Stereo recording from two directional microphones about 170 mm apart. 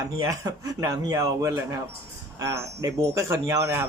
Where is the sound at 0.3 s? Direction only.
20° right (ahead or behind).